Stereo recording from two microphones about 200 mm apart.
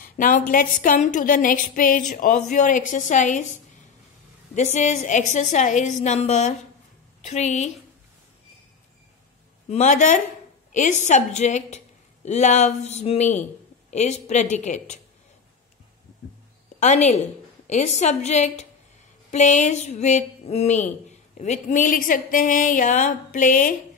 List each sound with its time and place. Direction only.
0.0 s a sound: 45° left (ahead or behind)
0.5 s a woman's voice: 40° left (ahead or behind)
4.6 s a woman's voice: 35° left (ahead or behind)
9.7 s a woman's voice: 35° left (ahead or behind)
16.8 s a woman's voice: 35° left (ahead or behind)